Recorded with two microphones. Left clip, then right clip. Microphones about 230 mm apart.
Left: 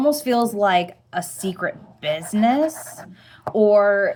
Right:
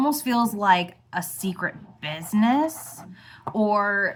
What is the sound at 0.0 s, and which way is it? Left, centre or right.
A woman's voice, centre.